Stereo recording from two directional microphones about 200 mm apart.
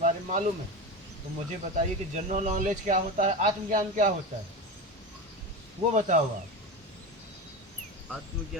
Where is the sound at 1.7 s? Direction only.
35° right (ahead or behind).